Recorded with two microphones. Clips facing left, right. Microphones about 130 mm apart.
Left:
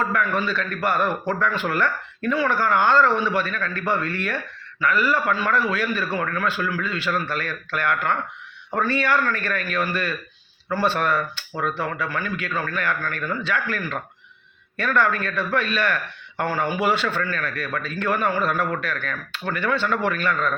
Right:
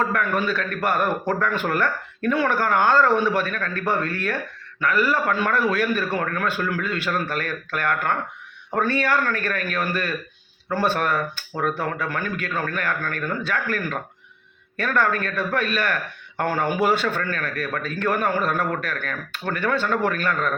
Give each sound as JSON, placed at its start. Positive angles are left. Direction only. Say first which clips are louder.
{"t": 0.0, "sound": "speech", "louder": "right 1 dB", "side_deg": -50}